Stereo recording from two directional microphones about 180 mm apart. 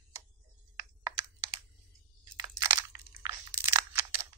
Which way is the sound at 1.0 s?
25° right (ahead or behind).